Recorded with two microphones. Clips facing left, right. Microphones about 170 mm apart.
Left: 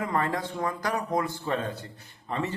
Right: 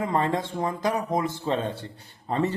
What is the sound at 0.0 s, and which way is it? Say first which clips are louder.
Speech: right 3 dB; 25° right (ahead or behind).